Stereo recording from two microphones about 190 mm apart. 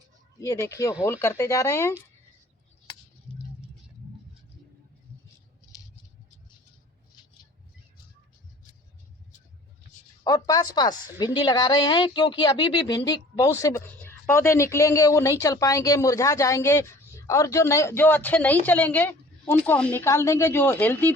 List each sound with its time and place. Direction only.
0.3 s a woman's voice: 15° left (ahead or behind)
10.2 s a woman's voice: 20° left (ahead or behind)